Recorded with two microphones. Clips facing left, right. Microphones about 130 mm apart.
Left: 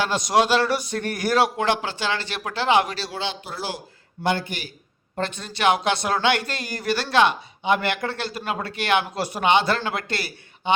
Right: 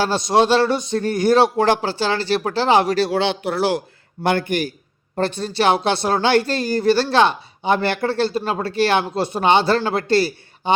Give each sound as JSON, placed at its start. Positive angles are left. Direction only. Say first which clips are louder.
{"t": 0.0, "sound": "a man's voice", "louder": "right 4 dB", "side_deg": -30}
{"t": 1.6, "sound": "speech", "louder": "right 5 dB", "side_deg": -35}
{"t": 3.0, "sound": "a man's voice", "louder": "right 11 dB", "side_deg": -65}
{"t": 5.1, "sound": "speech", "louder": "right 8 dB", "side_deg": -35}